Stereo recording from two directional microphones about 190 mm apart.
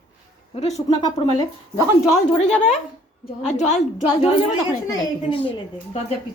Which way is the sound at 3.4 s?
40° left (ahead or behind).